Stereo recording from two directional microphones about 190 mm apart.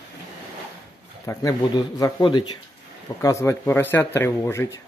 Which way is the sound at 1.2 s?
15° left (ahead or behind).